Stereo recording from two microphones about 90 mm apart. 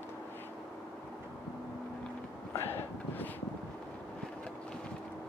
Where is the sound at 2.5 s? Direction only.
25° left (ahead or behind).